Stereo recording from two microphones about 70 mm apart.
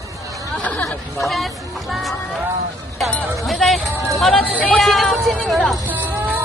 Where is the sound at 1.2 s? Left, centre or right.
Centre.